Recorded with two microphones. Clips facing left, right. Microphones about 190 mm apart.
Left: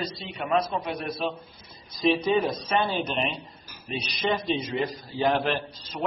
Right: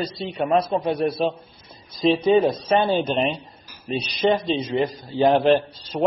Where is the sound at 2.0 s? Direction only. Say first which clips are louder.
Right 6 dB; 25° right (ahead or behind).